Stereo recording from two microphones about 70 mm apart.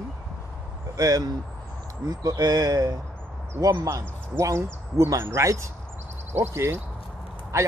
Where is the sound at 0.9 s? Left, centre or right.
Right.